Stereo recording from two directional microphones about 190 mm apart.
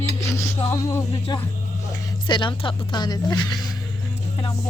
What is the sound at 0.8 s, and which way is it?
Music, 15° left (ahead or behind).